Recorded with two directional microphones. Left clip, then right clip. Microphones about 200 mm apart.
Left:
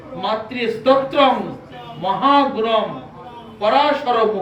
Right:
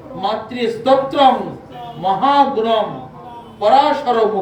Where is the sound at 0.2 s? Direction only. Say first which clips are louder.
Right 2 dB; 60° right (ahead or behind).